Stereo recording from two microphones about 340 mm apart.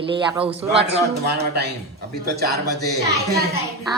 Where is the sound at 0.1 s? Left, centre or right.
Centre.